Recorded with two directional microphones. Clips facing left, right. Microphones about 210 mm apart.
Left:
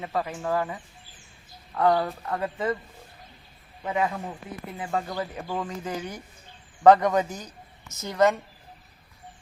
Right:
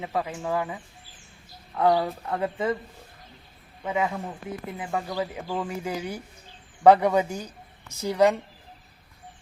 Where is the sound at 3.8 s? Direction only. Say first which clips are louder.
Even; 10° right (ahead or behind).